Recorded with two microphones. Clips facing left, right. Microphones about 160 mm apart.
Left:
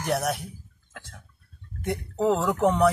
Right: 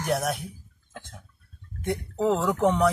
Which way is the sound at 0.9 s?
25° right (ahead or behind).